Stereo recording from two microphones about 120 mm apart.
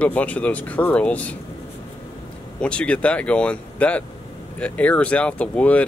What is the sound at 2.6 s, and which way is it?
Speech, 10° left (ahead or behind).